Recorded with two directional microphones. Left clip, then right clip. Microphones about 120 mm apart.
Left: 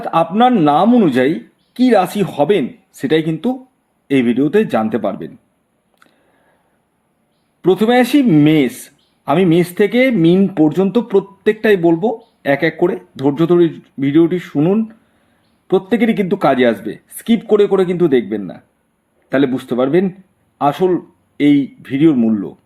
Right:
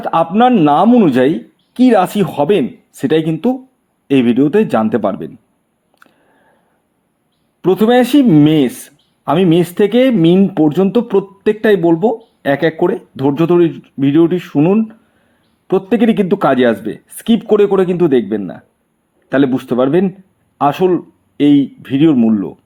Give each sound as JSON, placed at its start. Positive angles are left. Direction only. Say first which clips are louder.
{"t": 0.0, "sound": "speech", "louder": "right 1 dB", "side_deg": -35}
{"t": 7.6, "sound": "speech", "louder": "right 2 dB", "side_deg": -30}